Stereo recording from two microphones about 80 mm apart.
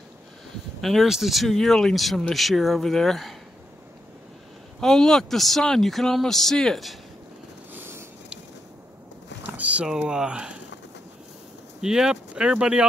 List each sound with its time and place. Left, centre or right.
0.7 s speech: centre
4.7 s speech: centre
7.7 s a sound: right
9.5 s speech: centre
11.8 s speech: centre